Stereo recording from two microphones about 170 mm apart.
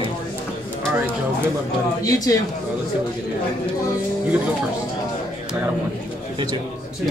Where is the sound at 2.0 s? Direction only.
20° left (ahead or behind).